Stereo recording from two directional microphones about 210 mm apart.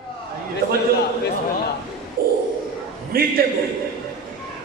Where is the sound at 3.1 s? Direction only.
45° right (ahead or behind).